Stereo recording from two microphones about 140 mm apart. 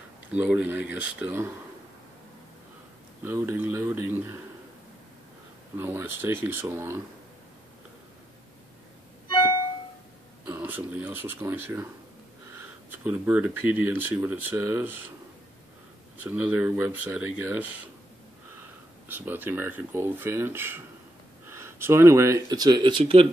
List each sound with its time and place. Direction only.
0.3 s speech: 10° right (ahead or behind)
3.3 s speech: 15° right (ahead or behind)
5.8 s speech: 15° right (ahead or behind)
9.3 s music: 35° left (ahead or behind)
10.4 s speech: 10° right (ahead or behind)
12.9 s speech: 15° right (ahead or behind)
16.2 s speech: 10° right (ahead or behind)
19.0 s speech: 15° right (ahead or behind); by 23.2 s 40° right (ahead or behind)